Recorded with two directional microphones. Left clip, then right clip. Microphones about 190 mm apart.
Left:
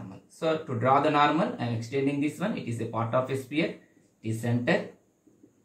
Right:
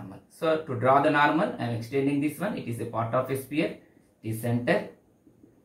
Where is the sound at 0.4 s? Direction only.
10° right (ahead or behind).